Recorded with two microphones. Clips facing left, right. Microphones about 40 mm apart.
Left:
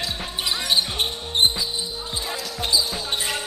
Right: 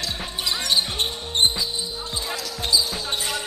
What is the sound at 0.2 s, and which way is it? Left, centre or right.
Basketball bounce, centre.